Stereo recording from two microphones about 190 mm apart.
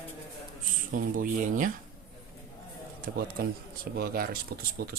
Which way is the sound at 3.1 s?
50° right (ahead or behind).